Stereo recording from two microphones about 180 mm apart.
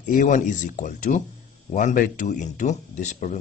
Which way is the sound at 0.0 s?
50° left (ahead or behind).